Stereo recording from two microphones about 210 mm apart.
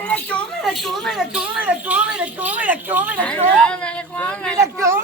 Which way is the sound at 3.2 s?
5° left (ahead or behind).